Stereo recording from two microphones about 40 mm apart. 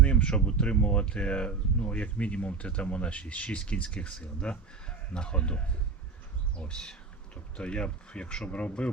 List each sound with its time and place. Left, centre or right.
0.0 s speech: left